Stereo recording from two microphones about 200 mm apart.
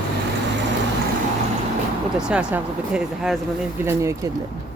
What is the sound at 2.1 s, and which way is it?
Speech, 5° right (ahead or behind).